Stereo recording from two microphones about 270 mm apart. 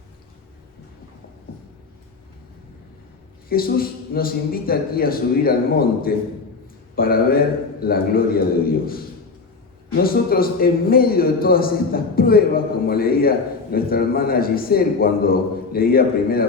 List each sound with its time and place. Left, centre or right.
3.5 s a man's voice: left